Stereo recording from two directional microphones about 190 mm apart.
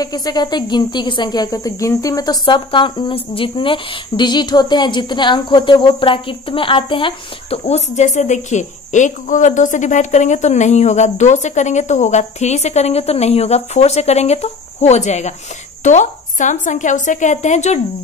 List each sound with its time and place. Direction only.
0.0 s speech: 20° left (ahead or behind); by 17.7 s 40° left (ahead or behind)